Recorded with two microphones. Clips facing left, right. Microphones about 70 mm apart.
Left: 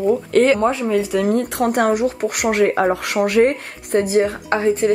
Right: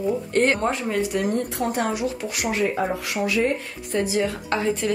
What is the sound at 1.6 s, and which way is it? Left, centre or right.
Speech, left.